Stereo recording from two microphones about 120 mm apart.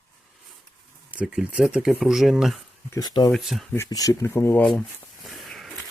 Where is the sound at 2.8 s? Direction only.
30° left (ahead or behind).